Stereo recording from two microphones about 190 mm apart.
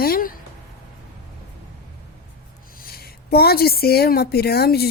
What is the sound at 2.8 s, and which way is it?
A woman's voice, 55° left (ahead or behind).